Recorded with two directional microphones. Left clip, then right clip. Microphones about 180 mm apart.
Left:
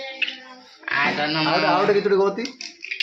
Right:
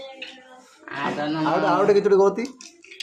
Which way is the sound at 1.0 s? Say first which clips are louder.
Left 4 dB; 15° right (ahead or behind).